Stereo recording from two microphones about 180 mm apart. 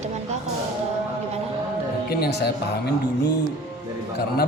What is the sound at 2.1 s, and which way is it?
Speech, 60° left (ahead or behind).